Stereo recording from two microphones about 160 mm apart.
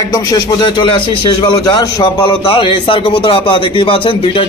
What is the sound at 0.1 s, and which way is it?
A man's voice, 25° left (ahead or behind).